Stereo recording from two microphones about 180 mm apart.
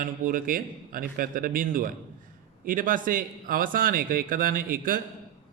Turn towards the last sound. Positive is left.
turn(degrees=-50)  # may be behind; listen again after turning